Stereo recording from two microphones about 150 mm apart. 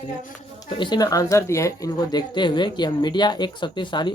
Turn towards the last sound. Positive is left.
turn(degrees=30)  # may be behind; listen again after turning